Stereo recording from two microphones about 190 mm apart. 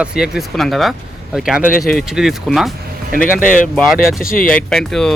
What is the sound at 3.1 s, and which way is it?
Speech, 45° left (ahead or behind).